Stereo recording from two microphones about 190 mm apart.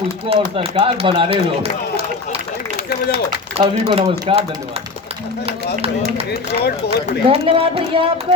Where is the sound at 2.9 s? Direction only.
60° left (ahead or behind).